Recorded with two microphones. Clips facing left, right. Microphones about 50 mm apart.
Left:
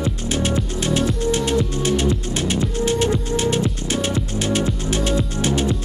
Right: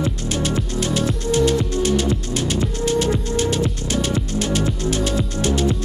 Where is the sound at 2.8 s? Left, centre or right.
Left.